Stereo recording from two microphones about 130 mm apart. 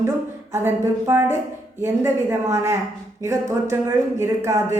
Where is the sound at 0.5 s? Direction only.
20° right (ahead or behind).